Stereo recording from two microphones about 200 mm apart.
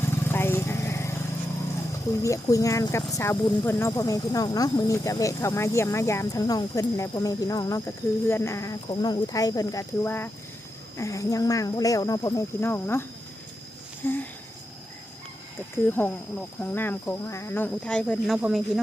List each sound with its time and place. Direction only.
0.3 s vehicle: 10° left (ahead or behind)
2.2 s speech: 15° left (ahead or behind)
15.8 s speech: 10° left (ahead or behind)